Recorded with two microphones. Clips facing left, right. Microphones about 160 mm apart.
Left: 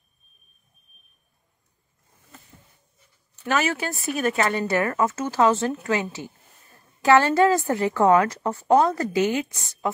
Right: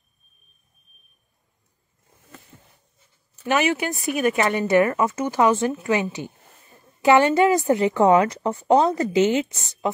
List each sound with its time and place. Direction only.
3.4 s speech: 15° right (ahead or behind)